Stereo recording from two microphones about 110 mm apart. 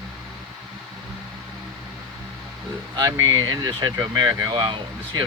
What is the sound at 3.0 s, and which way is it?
Speech, 40° right (ahead or behind).